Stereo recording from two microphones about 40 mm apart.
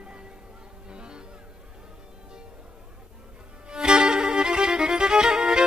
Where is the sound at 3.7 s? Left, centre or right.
Right.